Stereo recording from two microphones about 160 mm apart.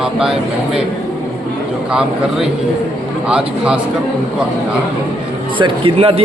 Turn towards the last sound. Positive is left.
turn(degrees=-35)  # may be behind; listen again after turning